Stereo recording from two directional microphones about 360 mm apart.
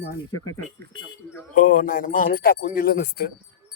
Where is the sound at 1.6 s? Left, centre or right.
Left.